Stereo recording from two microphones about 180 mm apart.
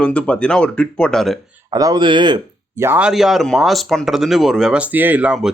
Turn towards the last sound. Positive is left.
turn(degrees=-5)  # may be behind; listen again after turning